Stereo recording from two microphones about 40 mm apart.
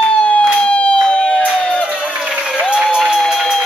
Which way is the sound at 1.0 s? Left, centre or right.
Left.